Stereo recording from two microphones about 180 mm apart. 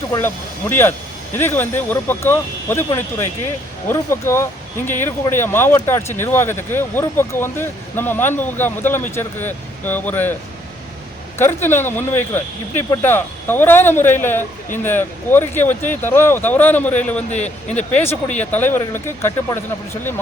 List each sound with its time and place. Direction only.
0.1 s speech: 10° left (ahead or behind)
11.3 s speech: 10° left (ahead or behind)
17.3 s speech: 40° left (ahead or behind)
18.3 s speech: 10° left (ahead or behind)